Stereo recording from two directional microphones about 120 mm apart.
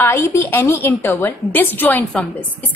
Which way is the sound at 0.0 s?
20° left (ahead or behind).